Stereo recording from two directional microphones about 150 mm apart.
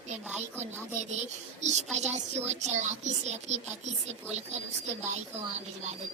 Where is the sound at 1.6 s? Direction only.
50° right (ahead or behind).